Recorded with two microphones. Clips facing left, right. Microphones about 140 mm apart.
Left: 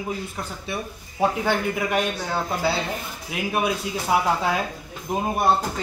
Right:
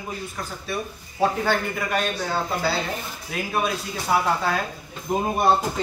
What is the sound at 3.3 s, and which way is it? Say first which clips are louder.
Speech: left 1 dB; 15° left (ahead or behind).